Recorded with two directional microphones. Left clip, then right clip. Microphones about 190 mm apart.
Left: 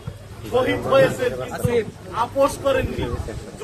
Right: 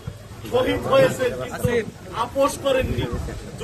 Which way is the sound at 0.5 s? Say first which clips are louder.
Left 1 dB; 15° right (ahead or behind).